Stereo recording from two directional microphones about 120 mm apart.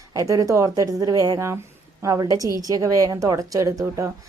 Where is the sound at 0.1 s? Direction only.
30° right (ahead or behind).